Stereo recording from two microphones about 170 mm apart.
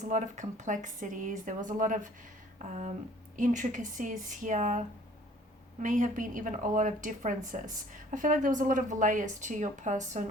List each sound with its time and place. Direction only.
0.0 s a woman's voice: 45° right (ahead or behind)
5.8 s a woman's voice: 45° right (ahead or behind)